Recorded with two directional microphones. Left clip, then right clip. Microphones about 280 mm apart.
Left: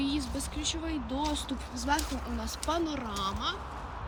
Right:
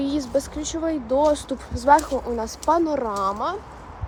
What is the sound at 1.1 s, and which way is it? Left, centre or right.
Speech, centre.